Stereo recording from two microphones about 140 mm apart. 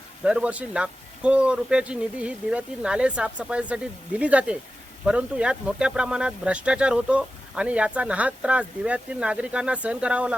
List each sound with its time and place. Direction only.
0.3 s speech: 10° right (ahead or behind)